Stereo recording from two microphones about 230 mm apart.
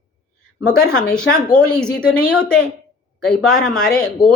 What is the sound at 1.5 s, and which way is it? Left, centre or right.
Speech, centre.